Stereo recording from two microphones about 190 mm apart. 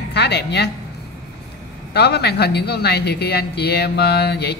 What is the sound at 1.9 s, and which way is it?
Speech, 60° left (ahead or behind).